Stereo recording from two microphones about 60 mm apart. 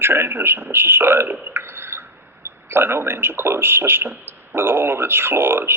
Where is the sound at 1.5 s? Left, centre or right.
Right.